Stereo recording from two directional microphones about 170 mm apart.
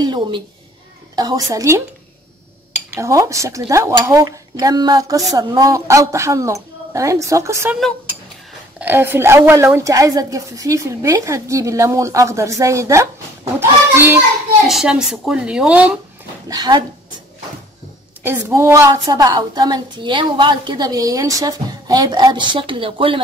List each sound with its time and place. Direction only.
0.0 s a sound: 25° right (ahead or behind)
1.1 s a woman's voice: 20° right (ahead or behind)
3.0 s a woman's voice: 20° right (ahead or behind)
8.7 s a woman's voice: 10° right (ahead or behind)
14.7 s speech: 5° right (ahead or behind)
16.4 s a woman's voice: 25° right (ahead or behind)
18.2 s a woman's voice: 15° right (ahead or behind)